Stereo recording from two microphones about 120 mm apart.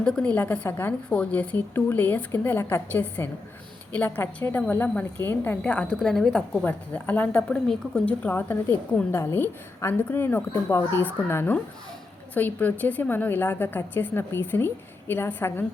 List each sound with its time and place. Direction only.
0.0 s a woman's voice: 10° left (ahead or behind)